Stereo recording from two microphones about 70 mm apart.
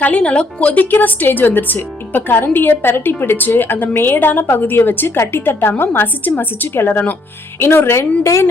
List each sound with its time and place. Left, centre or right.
0.0 s a woman's voice: centre; by 8.4 s left